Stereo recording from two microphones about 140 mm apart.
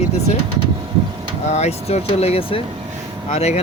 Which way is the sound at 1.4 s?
50° left (ahead or behind).